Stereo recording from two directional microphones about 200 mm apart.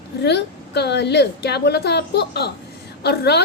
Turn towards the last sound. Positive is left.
turn(degrees=55)  # may be behind; listen again after turning